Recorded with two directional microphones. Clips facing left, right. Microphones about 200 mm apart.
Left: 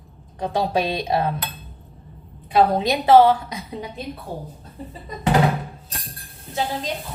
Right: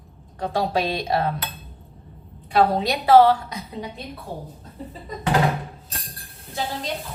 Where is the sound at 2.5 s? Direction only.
20° left (ahead or behind).